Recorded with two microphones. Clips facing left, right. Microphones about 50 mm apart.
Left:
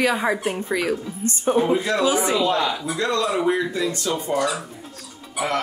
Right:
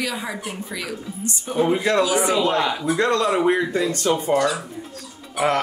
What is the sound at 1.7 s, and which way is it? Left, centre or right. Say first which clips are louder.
Speech: right 1 dB; right.